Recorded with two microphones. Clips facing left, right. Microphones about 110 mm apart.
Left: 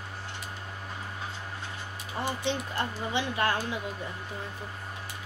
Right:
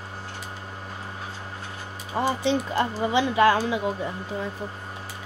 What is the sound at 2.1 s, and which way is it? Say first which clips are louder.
Speech: right 8 dB; 90° right.